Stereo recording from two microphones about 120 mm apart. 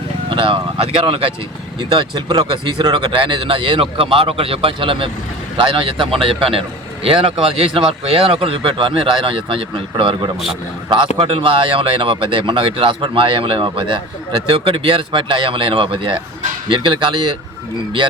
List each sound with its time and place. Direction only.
0.3 s speech: 45° right (ahead or behind)